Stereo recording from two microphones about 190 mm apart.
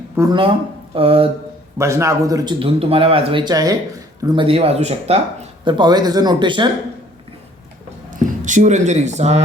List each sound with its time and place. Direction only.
0.2 s speech: 25° right (ahead or behind)
1.8 s speech: 15° right (ahead or behind); by 5.2 s 35° right (ahead or behind)
5.6 s speech: 25° right (ahead or behind)
8.1 s speech: 40° right (ahead or behind)